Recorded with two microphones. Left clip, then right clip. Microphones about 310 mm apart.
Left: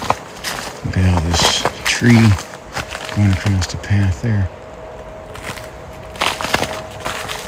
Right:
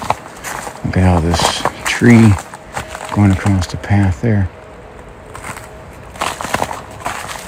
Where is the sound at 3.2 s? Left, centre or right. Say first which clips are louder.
Right 5 dB; centre.